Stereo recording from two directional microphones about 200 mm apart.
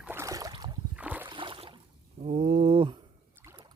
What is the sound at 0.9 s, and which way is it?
Boat, 5° right (ahead or behind).